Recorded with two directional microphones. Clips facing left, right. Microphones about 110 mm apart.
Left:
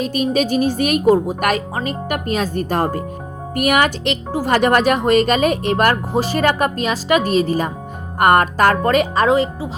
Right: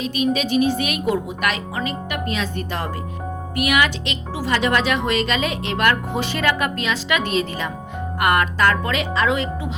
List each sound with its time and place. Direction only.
0.0 s speech: 45° left (ahead or behind)